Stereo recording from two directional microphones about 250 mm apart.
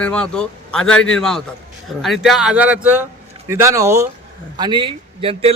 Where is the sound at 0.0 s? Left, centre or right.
Centre.